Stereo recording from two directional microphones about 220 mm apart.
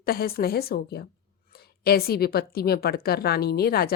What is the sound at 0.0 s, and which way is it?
A woman's voice, 45° left (ahead or behind).